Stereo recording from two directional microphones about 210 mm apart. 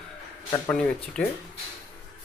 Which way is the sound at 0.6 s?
5° left (ahead or behind).